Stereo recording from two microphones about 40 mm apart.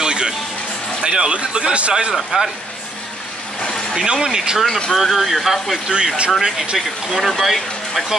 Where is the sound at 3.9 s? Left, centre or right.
Centre.